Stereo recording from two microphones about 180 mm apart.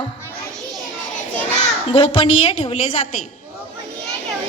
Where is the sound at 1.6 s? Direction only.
30° left (ahead or behind).